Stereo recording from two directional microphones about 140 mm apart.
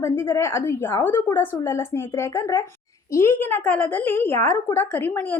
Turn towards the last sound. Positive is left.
turn(degrees=15)  # may be behind; listen again after turning